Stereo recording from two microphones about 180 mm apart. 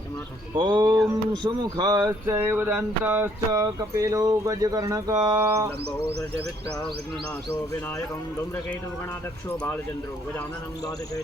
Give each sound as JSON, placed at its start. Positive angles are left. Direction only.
{"t": 0.5, "sound": "speech", "side_deg": -25}